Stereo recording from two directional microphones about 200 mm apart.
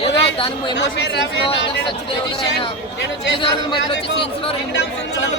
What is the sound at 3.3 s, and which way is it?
Speech, 25° left (ahead or behind).